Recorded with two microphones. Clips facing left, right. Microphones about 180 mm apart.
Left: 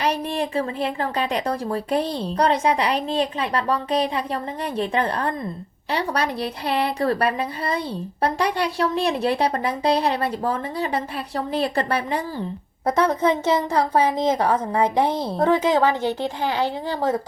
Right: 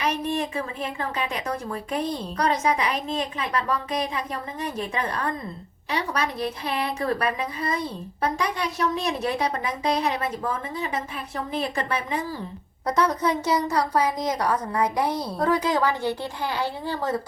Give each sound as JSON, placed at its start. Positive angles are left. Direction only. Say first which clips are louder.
{"t": 0.0, "sound": "a woman's voice", "louder": "left 2 dB", "side_deg": 30}
{"t": 16.2, "sound": "a child's voice", "louder": "left 5 dB", "side_deg": 90}